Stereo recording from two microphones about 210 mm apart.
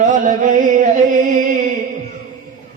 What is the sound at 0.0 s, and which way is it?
Music, 35° right (ahead or behind).